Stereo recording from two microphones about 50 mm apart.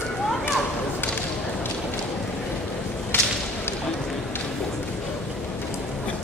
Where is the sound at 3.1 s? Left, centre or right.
Left.